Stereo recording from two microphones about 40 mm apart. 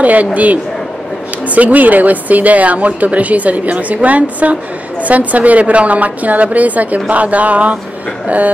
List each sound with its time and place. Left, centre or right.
0.0 s a woman's voice: right